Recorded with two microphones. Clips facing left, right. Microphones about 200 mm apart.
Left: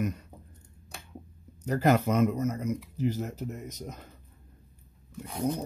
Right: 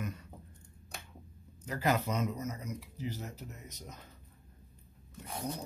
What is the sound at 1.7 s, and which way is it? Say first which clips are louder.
Speech: left 8 dB; 50° left (ahead or behind).